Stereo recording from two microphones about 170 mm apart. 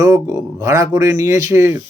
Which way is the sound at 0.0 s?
20° right (ahead or behind).